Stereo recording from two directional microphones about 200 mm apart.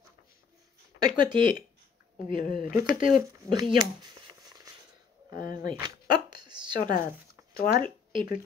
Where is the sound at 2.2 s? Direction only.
40° left (ahead or behind).